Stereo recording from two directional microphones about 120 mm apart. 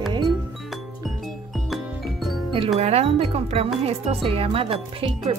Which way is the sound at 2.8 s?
60° right (ahead or behind).